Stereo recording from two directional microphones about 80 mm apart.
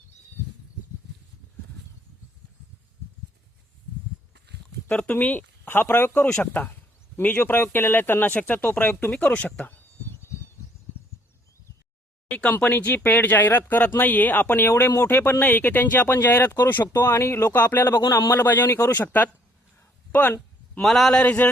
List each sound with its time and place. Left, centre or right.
4.9 s speech: centre
6.2 s speech: centre
12.3 s speech: centre
20.8 s a man's voice: centre
21.2 s speech: centre